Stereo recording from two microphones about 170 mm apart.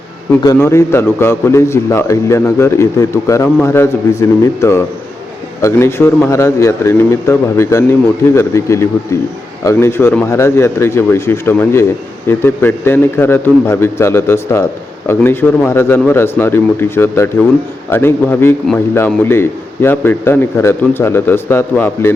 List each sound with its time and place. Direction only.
0.3 s a man's voice: 15° left (ahead or behind)